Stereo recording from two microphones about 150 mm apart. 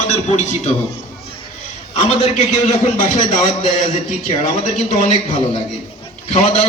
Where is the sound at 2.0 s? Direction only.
40° left (ahead or behind).